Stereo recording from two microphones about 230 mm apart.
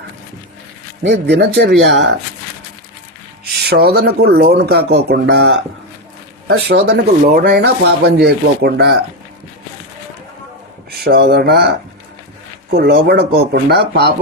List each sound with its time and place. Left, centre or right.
1.0 s speech: right
3.6 s speech: right
6.7 s speech: right
11.0 s speech: right